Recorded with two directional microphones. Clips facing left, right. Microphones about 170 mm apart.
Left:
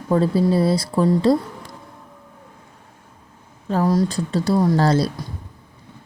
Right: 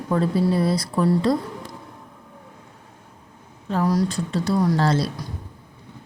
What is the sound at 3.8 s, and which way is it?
Speech, 25° left (ahead or behind).